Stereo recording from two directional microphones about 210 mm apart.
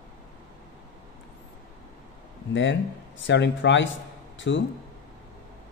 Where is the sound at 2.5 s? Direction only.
60° left (ahead or behind).